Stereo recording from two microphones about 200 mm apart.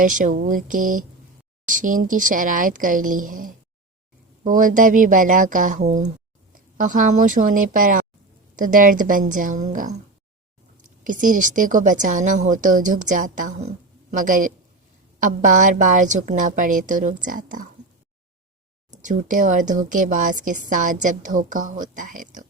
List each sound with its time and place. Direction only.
0.0 s speech: 40° right (ahead or behind)
18.9 s speech: 40° right (ahead or behind)